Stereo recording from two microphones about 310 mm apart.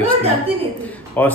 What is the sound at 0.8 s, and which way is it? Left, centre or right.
Speech, centre.